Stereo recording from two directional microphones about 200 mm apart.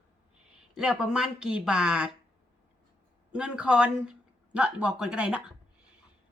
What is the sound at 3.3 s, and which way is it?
Speech, 5° right (ahead or behind).